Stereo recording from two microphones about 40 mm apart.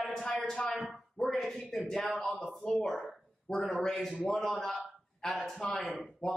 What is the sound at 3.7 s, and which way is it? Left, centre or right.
A man's voice, centre.